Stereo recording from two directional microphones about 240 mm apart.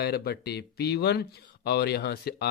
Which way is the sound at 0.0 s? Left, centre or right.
Left.